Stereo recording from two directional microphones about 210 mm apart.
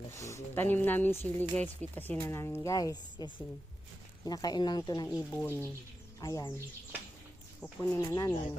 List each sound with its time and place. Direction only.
0.1 s a woman's voice: 15° left (ahead or behind)
7.6 s a woman's voice: 10° left (ahead or behind)